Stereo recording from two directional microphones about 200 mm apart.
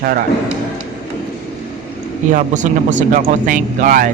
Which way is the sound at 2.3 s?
40° right (ahead or behind).